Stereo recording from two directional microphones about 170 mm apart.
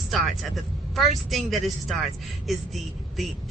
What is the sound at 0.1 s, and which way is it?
A woman's voice, centre (ahead or behind).